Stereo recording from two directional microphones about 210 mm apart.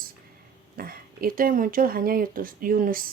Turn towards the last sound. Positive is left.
turn(degrees=-40)  # may be behind; listen again after turning